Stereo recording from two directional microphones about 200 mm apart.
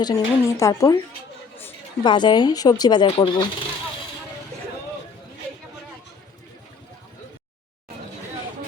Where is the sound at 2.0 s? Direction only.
20° left (ahead or behind).